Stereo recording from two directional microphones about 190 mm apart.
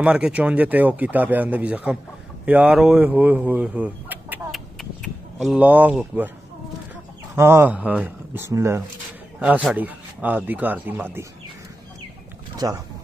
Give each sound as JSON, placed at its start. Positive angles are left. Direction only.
{"t": 0.0, "sound": "speech", "side_deg": -5}
{"t": 7.3, "sound": "speech", "side_deg": -15}
{"t": 9.4, "sound": "speech", "side_deg": -5}
{"t": 12.5, "sound": "speech", "side_deg": -20}